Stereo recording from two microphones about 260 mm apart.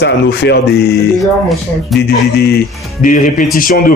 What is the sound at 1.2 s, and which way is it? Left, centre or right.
Speech, centre.